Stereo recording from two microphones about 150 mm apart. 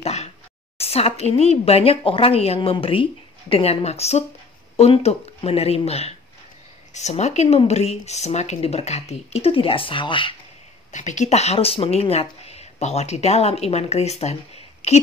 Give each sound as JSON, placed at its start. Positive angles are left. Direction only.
{"t": 0.0, "sound": "a sound", "side_deg": 45}
{"t": 0.7, "sound": "a woman's voice", "side_deg": 40}
{"t": 10.9, "sound": "speech", "side_deg": 55}